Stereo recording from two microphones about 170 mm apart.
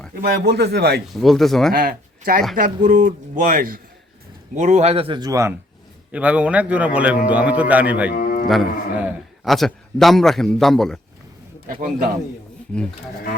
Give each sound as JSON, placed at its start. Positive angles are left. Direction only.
{"t": 0.2, "sound": "speech", "side_deg": -70}
{"t": 1.0, "sound": "a man's voice", "side_deg": 0}
{"t": 1.7, "sound": "speech", "side_deg": -60}
{"t": 6.1, "sound": "a man's voice", "side_deg": -10}
{"t": 8.1, "sound": "a sound", "side_deg": 50}
{"t": 8.4, "sound": "a man's voice", "side_deg": -5}